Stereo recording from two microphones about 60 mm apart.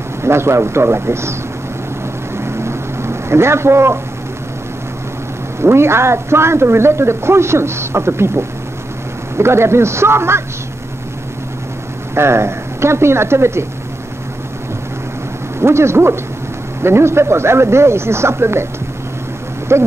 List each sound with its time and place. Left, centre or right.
0.2 s a man's voice: right
2.3 s a sound: right
5.6 s a man's voice: right
12.2 s a man's voice: right
15.6 s a man's voice: right
19.7 s a man's voice: right